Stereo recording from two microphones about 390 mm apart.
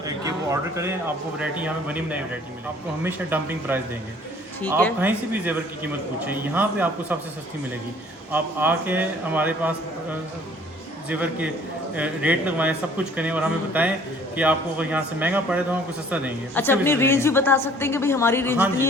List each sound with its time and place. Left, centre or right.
0.0 s a man's voice: centre
8.3 s a woman's voice: centre